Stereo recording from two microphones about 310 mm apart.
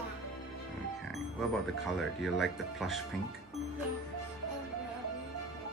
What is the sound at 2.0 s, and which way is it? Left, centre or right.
Speech, centre.